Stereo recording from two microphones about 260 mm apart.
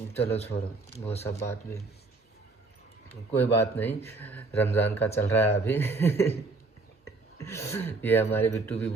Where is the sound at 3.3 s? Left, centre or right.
Centre.